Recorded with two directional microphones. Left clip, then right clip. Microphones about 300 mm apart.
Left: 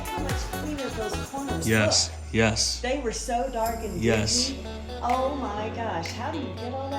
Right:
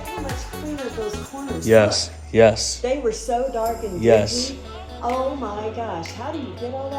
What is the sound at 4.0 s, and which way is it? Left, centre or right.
Speech, centre.